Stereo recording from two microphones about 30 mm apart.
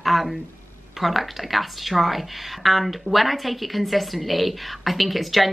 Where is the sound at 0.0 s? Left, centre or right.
Centre.